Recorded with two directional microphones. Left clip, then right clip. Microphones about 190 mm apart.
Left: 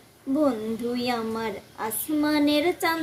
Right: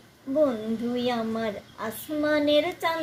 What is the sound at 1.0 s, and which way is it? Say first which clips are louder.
Carnatic music: right 1 dB; 20° left (ahead or behind).